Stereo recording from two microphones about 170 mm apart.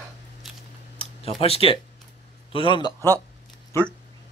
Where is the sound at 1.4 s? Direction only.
35° left (ahead or behind).